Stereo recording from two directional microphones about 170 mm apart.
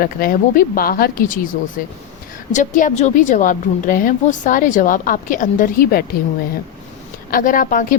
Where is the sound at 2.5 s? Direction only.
45° left (ahead or behind).